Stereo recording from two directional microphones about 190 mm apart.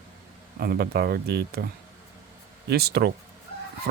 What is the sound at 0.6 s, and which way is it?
Speech, 55° right (ahead or behind).